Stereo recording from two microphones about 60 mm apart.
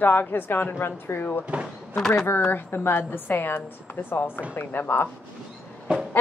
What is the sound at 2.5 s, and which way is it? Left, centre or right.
A woman's voice, left.